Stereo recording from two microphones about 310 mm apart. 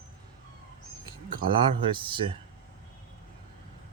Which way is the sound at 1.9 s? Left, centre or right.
Centre.